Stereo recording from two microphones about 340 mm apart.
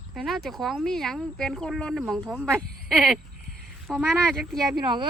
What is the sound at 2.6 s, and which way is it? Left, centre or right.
Speech, right.